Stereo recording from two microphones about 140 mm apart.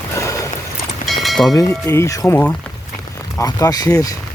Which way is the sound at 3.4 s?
25° left (ahead or behind).